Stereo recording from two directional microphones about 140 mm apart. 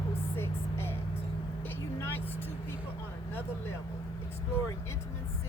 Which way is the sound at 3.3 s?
15° left (ahead or behind).